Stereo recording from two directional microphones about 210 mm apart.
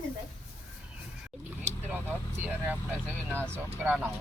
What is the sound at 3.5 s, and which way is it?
Speech, 10° right (ahead or behind).